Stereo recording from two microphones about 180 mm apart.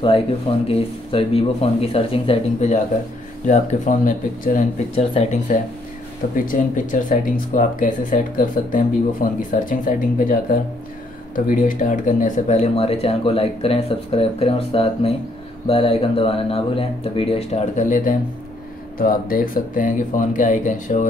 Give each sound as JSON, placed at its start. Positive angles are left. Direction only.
{"t": 0.0, "sound": "speech", "side_deg": 30}
{"t": 4.9, "sound": "speech", "side_deg": 35}
{"t": 6.3, "sound": "speech", "side_deg": 50}